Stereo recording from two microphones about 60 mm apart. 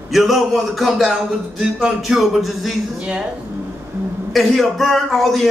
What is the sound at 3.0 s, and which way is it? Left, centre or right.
Speech, centre.